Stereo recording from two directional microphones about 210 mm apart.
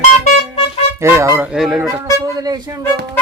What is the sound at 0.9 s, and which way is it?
Speech, 10° right (ahead or behind).